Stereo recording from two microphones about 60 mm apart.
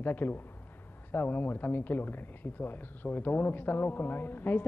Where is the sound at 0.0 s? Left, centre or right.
Left.